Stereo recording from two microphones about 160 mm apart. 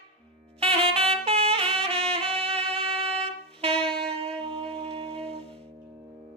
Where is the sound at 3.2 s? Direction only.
35° right (ahead or behind).